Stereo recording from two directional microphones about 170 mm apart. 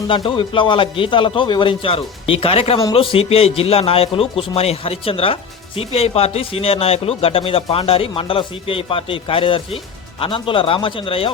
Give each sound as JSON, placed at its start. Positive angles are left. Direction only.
{"t": 0.1, "sound": "speech", "side_deg": 30}